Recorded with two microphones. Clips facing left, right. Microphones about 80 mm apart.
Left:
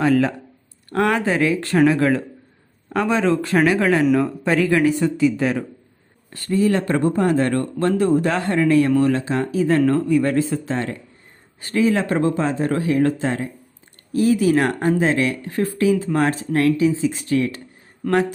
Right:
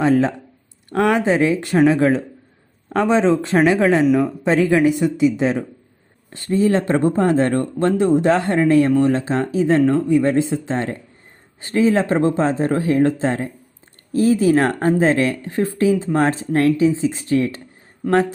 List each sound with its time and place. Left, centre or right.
0.0 s speech: right